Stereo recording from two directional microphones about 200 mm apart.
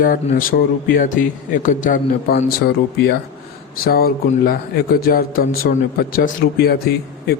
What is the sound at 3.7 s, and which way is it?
A man's voice, 50° left (ahead or behind).